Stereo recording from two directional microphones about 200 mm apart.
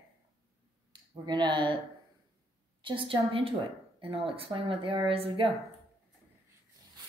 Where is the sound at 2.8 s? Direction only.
25° right (ahead or behind).